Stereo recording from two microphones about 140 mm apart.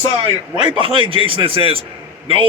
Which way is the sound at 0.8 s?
35° right (ahead or behind).